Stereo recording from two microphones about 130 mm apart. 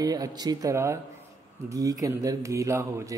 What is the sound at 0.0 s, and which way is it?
Speech, 30° right (ahead or behind).